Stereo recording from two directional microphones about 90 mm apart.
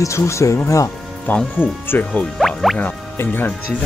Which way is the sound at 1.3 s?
20° left (ahead or behind).